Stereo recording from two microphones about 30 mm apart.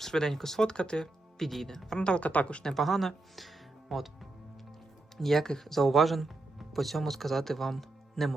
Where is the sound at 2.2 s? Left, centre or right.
Left.